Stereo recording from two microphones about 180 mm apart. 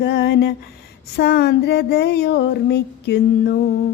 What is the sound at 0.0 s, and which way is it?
Child singing, 65° left (ahead or behind).